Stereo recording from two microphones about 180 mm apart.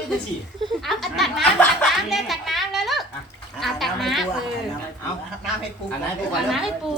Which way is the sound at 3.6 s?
Centre (ahead or behind).